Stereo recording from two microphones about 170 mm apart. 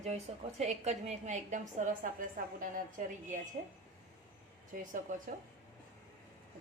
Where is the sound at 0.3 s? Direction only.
35° right (ahead or behind); by 3.1 s 50° right (ahead or behind).